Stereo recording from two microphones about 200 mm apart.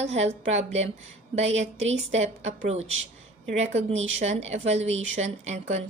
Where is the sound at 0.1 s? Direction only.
35° right (ahead or behind).